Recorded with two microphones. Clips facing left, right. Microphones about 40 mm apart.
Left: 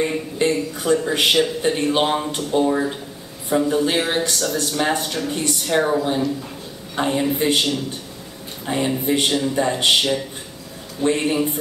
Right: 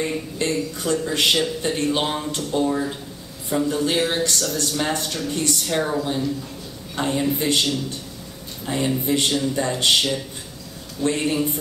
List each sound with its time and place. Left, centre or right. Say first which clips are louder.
0.0 s speech: left 4 dB; centre